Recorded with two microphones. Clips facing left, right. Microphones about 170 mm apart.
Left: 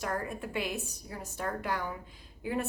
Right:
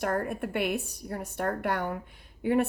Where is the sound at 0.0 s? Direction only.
60° right (ahead or behind).